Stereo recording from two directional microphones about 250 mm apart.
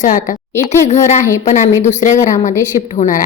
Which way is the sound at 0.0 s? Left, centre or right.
Left.